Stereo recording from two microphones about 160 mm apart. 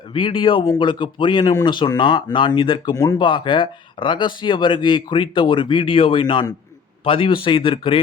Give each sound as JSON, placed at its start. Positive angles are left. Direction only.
{"t": 0.1, "sound": "a man's voice", "side_deg": 30}